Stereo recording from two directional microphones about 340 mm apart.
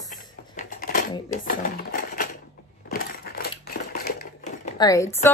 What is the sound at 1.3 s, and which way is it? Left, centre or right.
Speech, left.